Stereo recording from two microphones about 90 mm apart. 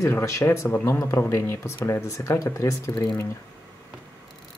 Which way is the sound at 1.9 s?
30° left (ahead or behind).